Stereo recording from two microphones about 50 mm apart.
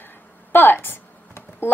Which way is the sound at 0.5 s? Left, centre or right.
Left.